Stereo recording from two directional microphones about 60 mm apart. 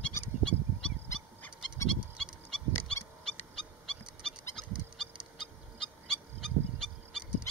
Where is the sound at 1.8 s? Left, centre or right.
Centre.